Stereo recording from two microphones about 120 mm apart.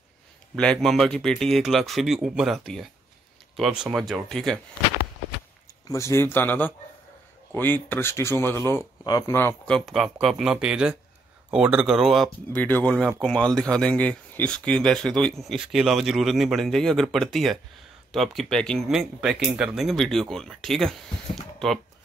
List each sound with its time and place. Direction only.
0.6 s speech: 5° left (ahead or behind)
5.9 s speech: 25° left (ahead or behind)
9.8 s speech: centre (ahead or behind)
12.5 s speech: 15° left (ahead or behind)
18.9 s speech: 5° right (ahead or behind)